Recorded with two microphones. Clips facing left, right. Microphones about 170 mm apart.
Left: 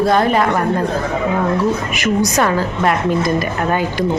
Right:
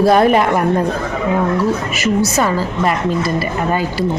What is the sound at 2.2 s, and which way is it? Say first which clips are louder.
Speech: left 1 dB; 5° right (ahead or behind).